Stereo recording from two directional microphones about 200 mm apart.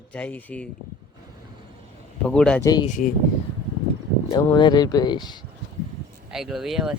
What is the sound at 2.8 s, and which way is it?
Speech, 40° left (ahead or behind).